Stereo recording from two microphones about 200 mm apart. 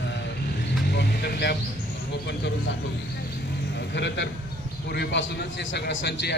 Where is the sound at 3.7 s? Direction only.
60° left (ahead or behind).